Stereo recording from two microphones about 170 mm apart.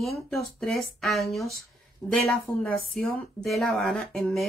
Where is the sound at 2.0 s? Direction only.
20° left (ahead or behind).